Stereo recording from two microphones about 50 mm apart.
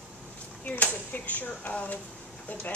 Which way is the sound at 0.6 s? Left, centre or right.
Left.